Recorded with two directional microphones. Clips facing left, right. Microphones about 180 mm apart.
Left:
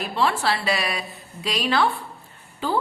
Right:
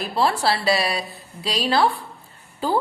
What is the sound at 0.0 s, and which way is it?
A woman's voice, 35° right (ahead or behind).